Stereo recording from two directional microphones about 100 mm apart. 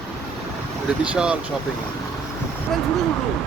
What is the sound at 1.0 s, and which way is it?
Speech, 10° right (ahead or behind).